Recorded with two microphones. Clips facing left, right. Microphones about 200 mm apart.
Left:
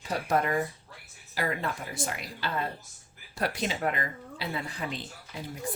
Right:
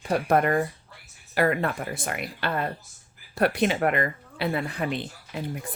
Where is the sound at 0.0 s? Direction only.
55° right (ahead or behind).